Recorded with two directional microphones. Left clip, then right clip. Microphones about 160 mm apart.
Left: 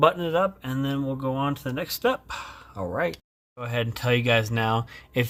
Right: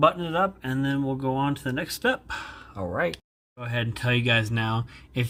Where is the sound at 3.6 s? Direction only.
35° left (ahead or behind).